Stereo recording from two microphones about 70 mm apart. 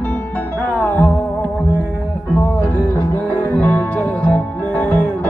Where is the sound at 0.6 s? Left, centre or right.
Left.